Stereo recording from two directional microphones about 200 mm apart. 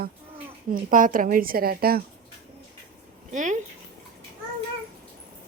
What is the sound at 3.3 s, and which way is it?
Speech, 40° right (ahead or behind).